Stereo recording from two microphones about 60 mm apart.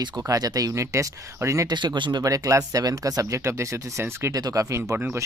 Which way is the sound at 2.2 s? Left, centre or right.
Right.